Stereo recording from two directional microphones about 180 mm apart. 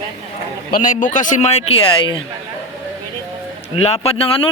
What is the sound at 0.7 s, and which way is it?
A man's voice, 45° left (ahead or behind).